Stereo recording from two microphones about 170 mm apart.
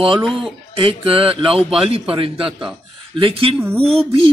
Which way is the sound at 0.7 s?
30° right (ahead or behind).